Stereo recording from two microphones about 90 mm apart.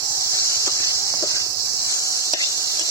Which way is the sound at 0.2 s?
35° left (ahead or behind).